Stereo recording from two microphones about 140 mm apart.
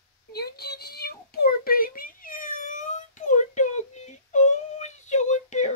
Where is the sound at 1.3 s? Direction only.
90° left.